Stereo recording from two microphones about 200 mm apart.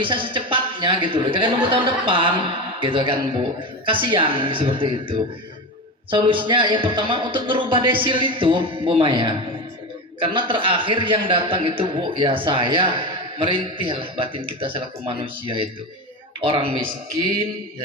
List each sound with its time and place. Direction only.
0.0 s a man's voice: 25° right (ahead or behind)